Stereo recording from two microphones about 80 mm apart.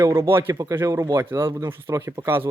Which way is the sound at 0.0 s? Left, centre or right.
Right.